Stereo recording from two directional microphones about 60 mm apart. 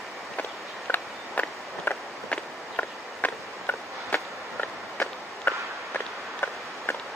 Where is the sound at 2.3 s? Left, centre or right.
Left.